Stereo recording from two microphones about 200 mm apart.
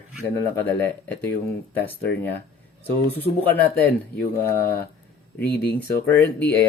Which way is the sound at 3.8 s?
10° left (ahead or behind).